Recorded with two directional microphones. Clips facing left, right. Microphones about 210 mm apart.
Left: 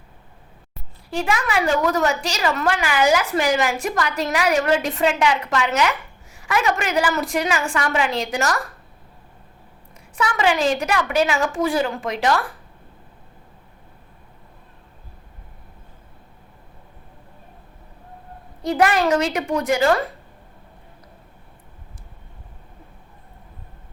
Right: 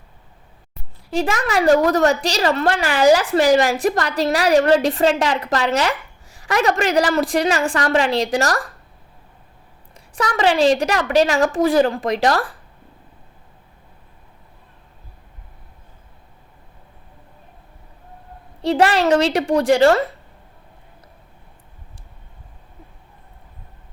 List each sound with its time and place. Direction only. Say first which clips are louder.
1.1 s a woman's voice: right 2 dB; 35° right (ahead or behind)
9.9 s a woman's voice: right 2 dB; 35° right (ahead or behind)
18.6 s a woman's voice: right 2 dB; 30° right (ahead or behind)